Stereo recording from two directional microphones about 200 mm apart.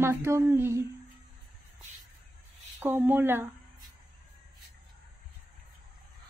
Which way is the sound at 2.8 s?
10° right (ahead or behind).